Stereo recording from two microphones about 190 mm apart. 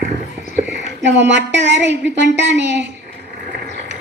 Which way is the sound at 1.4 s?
70° right (ahead or behind).